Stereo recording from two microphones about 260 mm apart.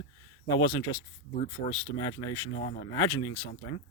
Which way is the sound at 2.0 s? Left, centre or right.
Centre.